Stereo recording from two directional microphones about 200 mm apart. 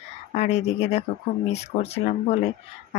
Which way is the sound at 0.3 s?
35° left (ahead or behind).